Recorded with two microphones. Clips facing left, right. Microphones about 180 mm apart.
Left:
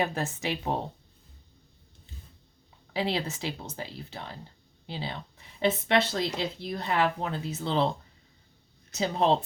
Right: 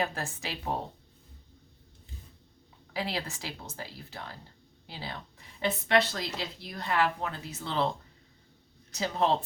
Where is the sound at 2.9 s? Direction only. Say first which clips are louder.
Left 5 dB; 20° left (ahead or behind).